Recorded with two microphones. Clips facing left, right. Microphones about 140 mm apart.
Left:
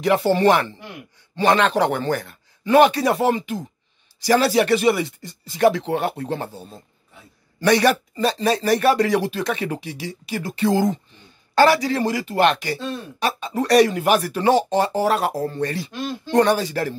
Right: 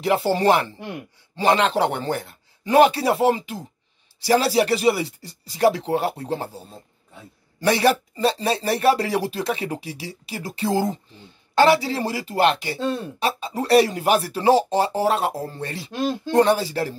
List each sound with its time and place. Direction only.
0.0 s speech: 30° right (ahead or behind)
7.6 s speech: 30° right (ahead or behind)